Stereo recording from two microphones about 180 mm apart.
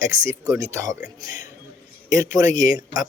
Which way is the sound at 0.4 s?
15° right (ahead or behind).